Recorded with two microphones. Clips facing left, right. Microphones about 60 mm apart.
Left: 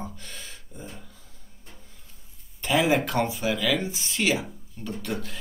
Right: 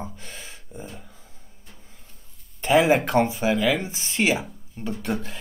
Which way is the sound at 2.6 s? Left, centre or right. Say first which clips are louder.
Right 4 dB; right.